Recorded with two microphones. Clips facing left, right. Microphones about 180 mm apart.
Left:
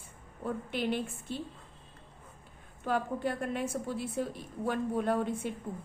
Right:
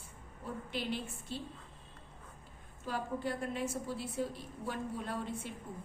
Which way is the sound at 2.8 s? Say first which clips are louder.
Left 6 dB; 55° left (ahead or behind).